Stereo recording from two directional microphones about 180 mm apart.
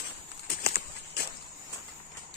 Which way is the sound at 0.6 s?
60° left (ahead or behind).